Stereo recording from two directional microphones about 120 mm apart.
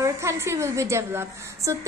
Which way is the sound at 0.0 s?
25° right (ahead or behind).